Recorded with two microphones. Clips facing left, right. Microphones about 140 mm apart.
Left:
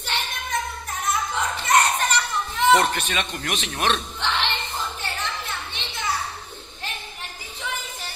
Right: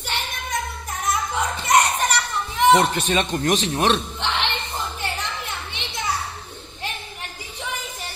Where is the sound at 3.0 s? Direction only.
35° right (ahead or behind).